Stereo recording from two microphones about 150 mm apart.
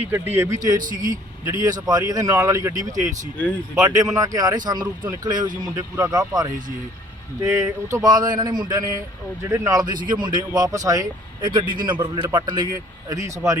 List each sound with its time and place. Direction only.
0.0 s speech: 15° right (ahead or behind)
0.8 s a man's voice: 65° right (ahead or behind)
1.6 s speech: 25° right (ahead or behind)
2.9 s a man's voice: 55° right (ahead or behind)
3.8 s speech: 25° right (ahead or behind)